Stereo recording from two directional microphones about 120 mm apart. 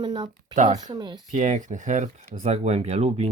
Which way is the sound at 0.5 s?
90° right.